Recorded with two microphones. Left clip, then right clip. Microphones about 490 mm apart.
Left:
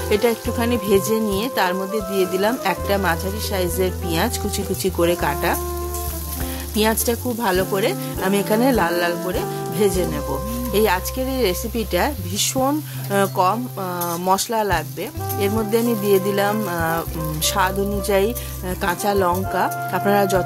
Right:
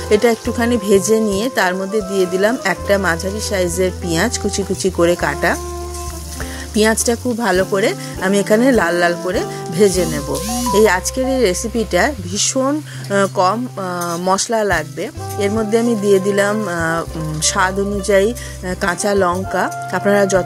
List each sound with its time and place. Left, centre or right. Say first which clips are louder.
0.1 s speech: right 5 dB; left
6.7 s speech: right 5 dB; left